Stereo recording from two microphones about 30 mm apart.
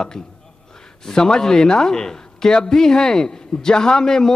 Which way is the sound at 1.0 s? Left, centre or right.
Left.